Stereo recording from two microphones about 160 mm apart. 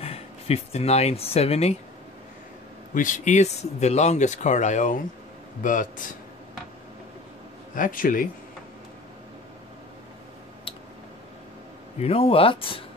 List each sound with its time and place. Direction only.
0.0 s speech: 40° left (ahead or behind)
2.9 s a man's voice: 55° left (ahead or behind)
7.7 s a man's voice: 60° left (ahead or behind)
12.0 s speech: 35° left (ahead or behind)